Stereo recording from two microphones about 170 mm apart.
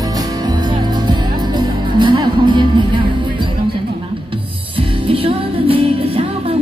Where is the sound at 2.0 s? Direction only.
25° right (ahead or behind).